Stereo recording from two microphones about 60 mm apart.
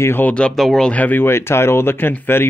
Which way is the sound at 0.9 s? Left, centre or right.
Left.